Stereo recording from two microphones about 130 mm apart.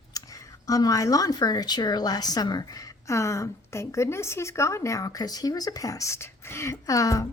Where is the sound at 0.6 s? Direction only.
25° left (ahead or behind).